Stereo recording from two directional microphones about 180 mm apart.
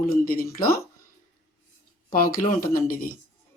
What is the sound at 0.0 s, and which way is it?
Speech, 55° left (ahead or behind).